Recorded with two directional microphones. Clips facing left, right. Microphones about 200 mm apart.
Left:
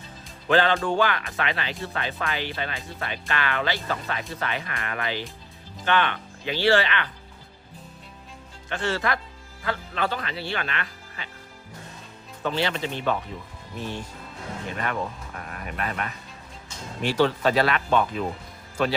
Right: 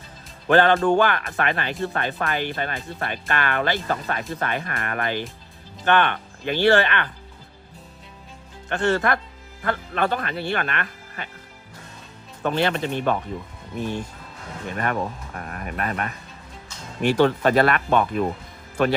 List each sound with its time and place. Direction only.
0.4 s speech: 50° right (ahead or behind)
8.7 s speech: 55° right (ahead or behind)
12.4 s speech: 55° right (ahead or behind)
15.4 s speech: 45° right (ahead or behind)